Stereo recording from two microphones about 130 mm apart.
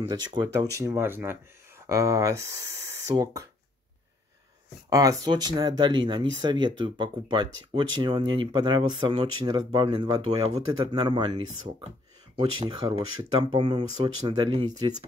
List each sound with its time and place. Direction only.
0.1 s speech: 35° right (ahead or behind)
4.8 s speech: 25° right (ahead or behind)